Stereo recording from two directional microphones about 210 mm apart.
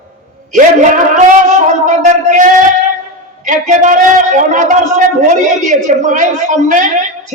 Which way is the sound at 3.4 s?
35° right (ahead or behind).